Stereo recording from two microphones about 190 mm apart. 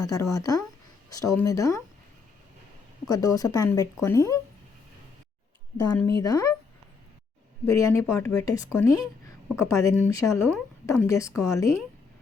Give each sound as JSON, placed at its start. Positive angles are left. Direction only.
{"t": 0.0, "sound": "speech", "side_deg": 20}
{"t": 3.1, "sound": "speech", "side_deg": 20}
{"t": 5.8, "sound": "speech", "side_deg": 20}
{"t": 7.7, "sound": "speech", "side_deg": 15}